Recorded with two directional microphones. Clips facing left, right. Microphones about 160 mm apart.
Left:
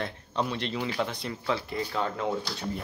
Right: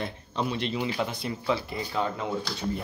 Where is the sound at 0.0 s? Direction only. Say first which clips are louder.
Even; 5° right (ahead or behind).